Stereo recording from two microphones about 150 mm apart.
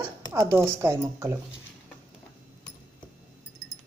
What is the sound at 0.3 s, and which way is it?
A woman's voice, 15° right (ahead or behind).